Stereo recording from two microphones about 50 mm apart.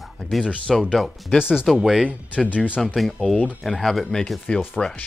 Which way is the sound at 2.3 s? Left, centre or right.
Left.